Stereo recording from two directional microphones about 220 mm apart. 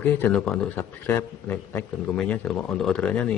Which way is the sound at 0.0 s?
5° left (ahead or behind).